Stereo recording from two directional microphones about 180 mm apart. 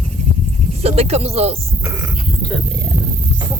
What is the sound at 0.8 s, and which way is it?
Speech, 35° right (ahead or behind).